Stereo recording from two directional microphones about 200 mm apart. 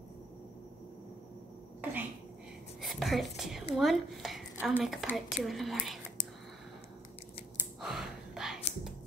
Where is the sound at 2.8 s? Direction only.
Centre (ahead or behind).